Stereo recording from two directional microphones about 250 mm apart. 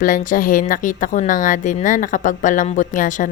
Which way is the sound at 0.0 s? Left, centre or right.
Left.